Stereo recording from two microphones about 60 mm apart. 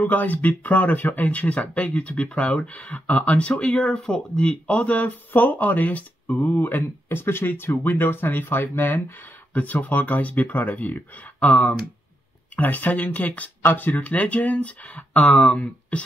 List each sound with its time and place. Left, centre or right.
0.0 s speech: left
9.5 s speech: left